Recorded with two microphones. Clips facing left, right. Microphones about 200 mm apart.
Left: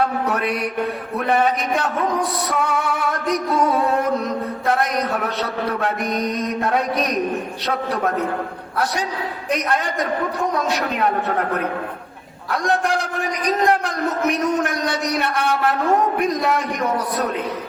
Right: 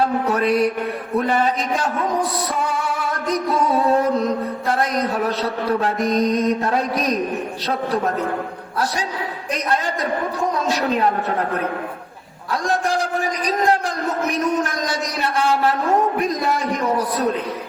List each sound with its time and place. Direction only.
1.2 s a man's voice: 60° left (ahead or behind)
4.8 s a man's voice: 30° right (ahead or behind)
14.6 s a man's voice: 60° left (ahead or behind)